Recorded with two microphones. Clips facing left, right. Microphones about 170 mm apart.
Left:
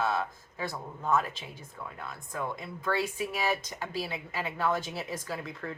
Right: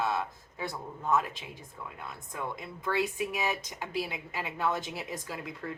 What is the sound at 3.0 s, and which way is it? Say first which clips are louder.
Speech: right 1 dB; 15° right (ahead or behind).